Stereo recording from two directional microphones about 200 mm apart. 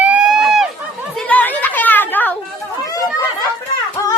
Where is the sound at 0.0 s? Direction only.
5° right (ahead or behind).